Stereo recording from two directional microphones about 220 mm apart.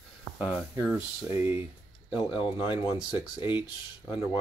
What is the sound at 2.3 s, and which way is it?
Speech, 20° left (ahead or behind).